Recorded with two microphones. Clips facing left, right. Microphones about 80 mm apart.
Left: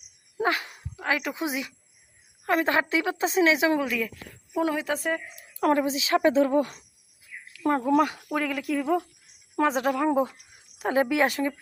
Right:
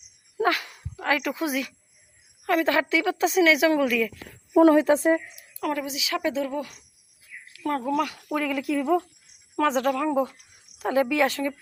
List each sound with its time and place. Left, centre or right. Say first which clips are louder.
0.3 s a sound: right 2 dB; left
1.1 s a woman's voice: right 3 dB; left
4.7 s a woman's voice: right 9 dB; right
5.5 s speech: left 5 dB; left
7.6 s a woman's voice: left 3 dB; left
8.3 s speech: right 2 dB; centre
9.9 s a woman's voice: even; left